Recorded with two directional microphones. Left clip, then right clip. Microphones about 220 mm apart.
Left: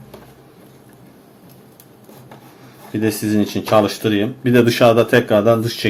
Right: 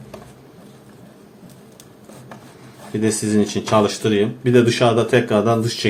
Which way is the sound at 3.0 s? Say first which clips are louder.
Left 1 dB; 25° left (ahead or behind).